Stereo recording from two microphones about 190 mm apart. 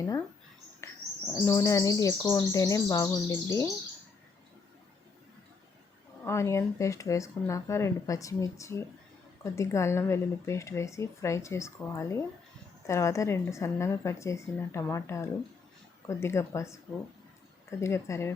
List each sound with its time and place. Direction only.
1.3 s speech: 15° left (ahead or behind)
6.2 s speech: 15° left (ahead or behind)